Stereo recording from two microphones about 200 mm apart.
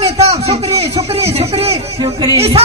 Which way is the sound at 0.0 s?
30° right (ahead or behind).